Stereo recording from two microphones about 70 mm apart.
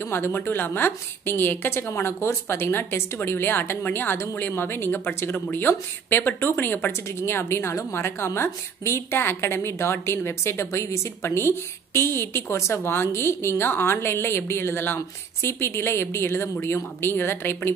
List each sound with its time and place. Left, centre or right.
0.0 s a woman's voice: left